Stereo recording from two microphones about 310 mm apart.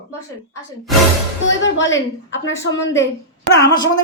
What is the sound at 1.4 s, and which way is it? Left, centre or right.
Speech, left.